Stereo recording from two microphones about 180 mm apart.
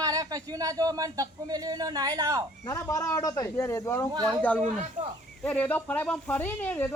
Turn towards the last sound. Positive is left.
turn(degrees=10)  # may be behind; listen again after turning